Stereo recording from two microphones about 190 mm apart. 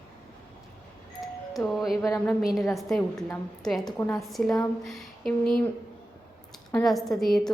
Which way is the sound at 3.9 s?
15° left (ahead or behind).